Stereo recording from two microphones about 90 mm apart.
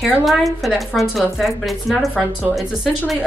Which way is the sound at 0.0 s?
Centre (ahead or behind).